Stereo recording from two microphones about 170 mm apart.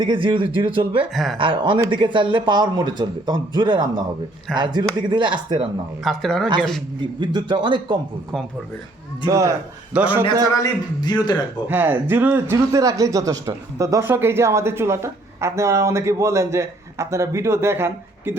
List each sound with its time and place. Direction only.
0.0 s speech: 30° right (ahead or behind)
1.1 s a man's voice: centre (ahead or behind)
1.4 s speech: 30° right (ahead or behind)
6.0 s a man's voice: centre (ahead or behind)
7.2 s speech: 25° right (ahead or behind)
9.2 s speech: 20° right (ahead or behind)
9.9 s speech: 10° right (ahead or behind)
10.5 s a man's voice: 20° left (ahead or behind)
11.7 s speech: 10° right (ahead or behind)